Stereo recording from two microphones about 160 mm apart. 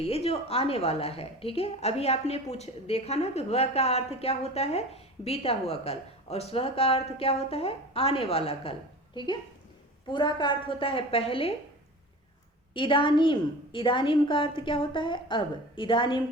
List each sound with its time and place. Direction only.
0.0 s a woman's voice: 40° left (ahead or behind)
9.1 s a woman's voice: 30° left (ahead or behind)
12.7 s a woman's voice: 30° left (ahead or behind)